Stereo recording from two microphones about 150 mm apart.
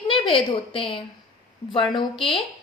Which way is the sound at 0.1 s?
35° left (ahead or behind).